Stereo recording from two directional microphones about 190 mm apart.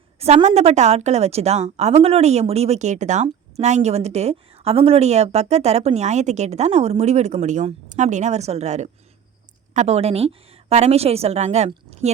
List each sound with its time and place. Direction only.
0.2 s a woman's voice: 35° right (ahead or behind)